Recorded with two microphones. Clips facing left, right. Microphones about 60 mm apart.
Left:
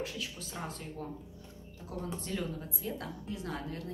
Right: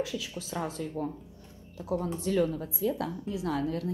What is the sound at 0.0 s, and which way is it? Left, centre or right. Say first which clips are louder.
Speech: right 5 dB; right.